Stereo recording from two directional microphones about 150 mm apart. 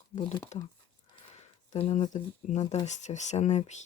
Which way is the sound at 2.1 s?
50° left (ahead or behind).